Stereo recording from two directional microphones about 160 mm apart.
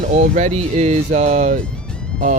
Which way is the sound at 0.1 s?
50° right (ahead or behind).